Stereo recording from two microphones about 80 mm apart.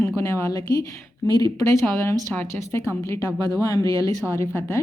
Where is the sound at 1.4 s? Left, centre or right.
Left.